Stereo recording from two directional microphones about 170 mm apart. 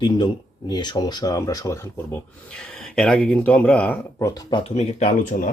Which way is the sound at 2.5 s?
5° left (ahead or behind).